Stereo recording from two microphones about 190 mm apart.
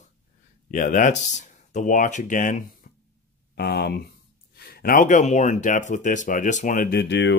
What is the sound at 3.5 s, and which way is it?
Speech, 60° left (ahead or behind).